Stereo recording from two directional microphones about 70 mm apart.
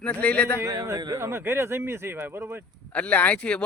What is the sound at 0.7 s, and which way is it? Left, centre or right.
Speech, right.